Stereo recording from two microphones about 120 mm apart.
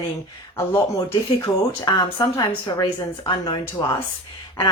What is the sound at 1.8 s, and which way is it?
Speech, 35° left (ahead or behind).